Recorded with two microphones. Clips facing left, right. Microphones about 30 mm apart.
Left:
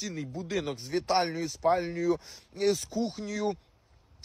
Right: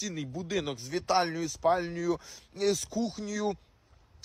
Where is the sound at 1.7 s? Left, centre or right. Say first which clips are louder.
Left 2 dB; centre.